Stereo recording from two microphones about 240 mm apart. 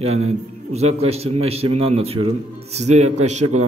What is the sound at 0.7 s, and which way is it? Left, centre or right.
A man's voice, right.